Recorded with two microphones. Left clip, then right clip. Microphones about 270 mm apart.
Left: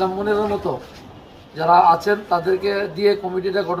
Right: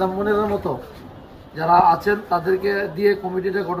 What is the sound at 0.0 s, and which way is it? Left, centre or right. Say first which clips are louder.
Speech: even; left.